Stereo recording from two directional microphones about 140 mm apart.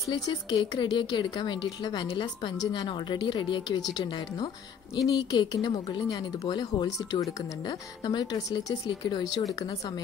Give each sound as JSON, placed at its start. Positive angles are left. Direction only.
{"t": 0.1, "sound": "speech", "side_deg": 30}
{"t": 5.0, "sound": "speech", "side_deg": 30}